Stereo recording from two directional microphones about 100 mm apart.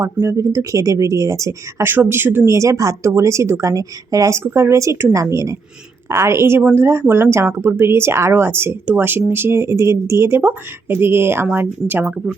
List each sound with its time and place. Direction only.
0.0 s speech: 30° right (ahead or behind)